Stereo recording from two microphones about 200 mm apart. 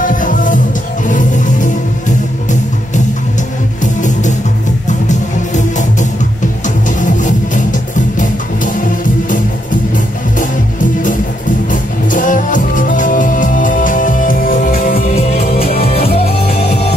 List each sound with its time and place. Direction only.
0.0 s music: 40° left (ahead or behind)
3.8 s music: 40° left (ahead or behind)
7.0 s music: 40° left (ahead or behind)
10.4 s music: 40° left (ahead or behind)
15.5 s music: 30° left (ahead or behind)